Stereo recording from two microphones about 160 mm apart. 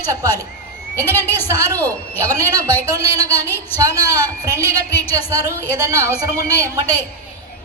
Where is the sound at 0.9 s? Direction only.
15° left (ahead or behind).